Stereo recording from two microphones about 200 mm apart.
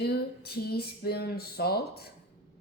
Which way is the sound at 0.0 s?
55° left (ahead or behind).